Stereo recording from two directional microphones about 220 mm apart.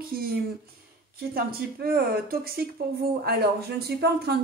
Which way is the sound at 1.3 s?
45° right (ahead or behind).